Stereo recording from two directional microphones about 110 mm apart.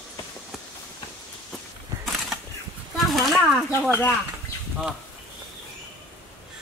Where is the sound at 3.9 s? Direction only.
20° left (ahead or behind).